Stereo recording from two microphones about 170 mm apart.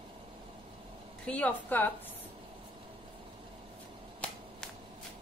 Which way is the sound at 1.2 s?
10° left (ahead or behind).